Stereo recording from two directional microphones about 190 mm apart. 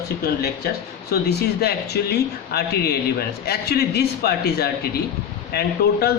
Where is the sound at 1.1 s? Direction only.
60° left (ahead or behind).